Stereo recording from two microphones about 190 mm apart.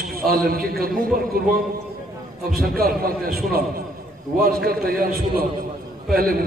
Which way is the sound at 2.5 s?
55° right (ahead or behind).